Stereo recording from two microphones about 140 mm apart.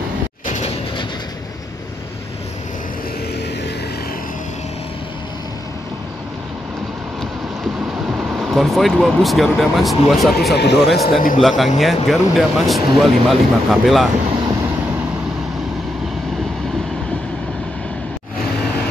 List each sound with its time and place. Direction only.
0.5 s a sound: 50° left (ahead or behind)
7.2 s speech: centre (ahead or behind)
11.1 s a man's voice: 80° left
11.4 s speech: centre (ahead or behind)